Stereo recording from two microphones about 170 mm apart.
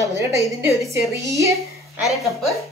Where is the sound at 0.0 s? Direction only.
20° right (ahead or behind).